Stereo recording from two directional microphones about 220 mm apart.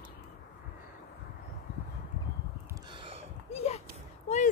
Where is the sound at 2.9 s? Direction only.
25° right (ahead or behind).